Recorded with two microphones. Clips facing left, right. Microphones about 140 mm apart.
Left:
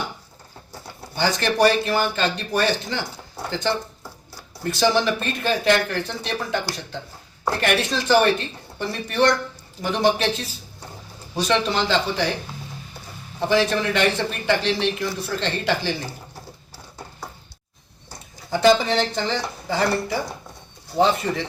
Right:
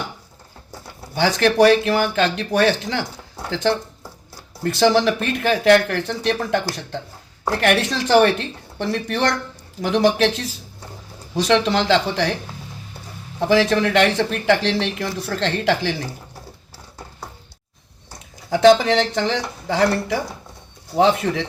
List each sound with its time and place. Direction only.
1.1 s speech: 90° right
4.6 s speech: 90° right
7.6 s speech: 90° right
13.5 s speech: 90° right
18.5 s speech: 85° right